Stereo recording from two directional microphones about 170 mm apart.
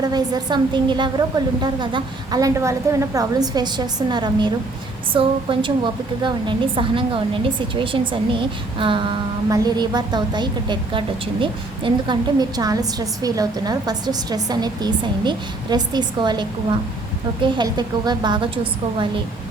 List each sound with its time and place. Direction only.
0.1 s a woman's voice: 25° right (ahead or behind)